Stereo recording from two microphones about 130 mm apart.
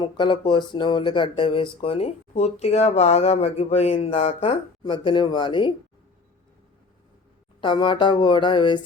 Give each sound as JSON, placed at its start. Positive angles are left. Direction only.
{"t": 0.0, "sound": "speech", "side_deg": 35}
{"t": 4.8, "sound": "speech", "side_deg": 40}
{"t": 7.6, "sound": "speech", "side_deg": 40}